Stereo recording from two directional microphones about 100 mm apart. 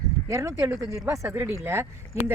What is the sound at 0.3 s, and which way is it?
Speech, 30° right (ahead or behind).